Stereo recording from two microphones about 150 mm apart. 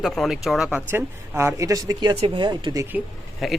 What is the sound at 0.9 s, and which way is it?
Speech, 15° right (ahead or behind).